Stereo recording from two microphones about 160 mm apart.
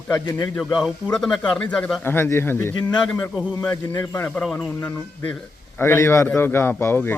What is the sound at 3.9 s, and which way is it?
Speech, 20° left (ahead or behind).